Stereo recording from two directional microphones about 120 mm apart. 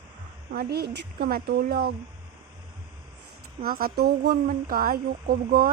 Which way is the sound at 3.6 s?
55° right (ahead or behind).